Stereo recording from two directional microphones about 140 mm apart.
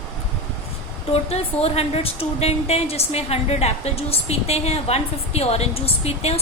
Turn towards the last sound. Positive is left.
turn(degrees=50)  # may be behind; listen again after turning